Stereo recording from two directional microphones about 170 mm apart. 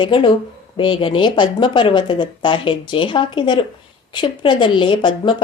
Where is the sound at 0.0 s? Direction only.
30° left (ahead or behind).